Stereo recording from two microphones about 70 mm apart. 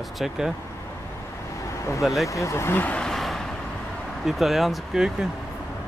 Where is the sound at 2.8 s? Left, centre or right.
Centre.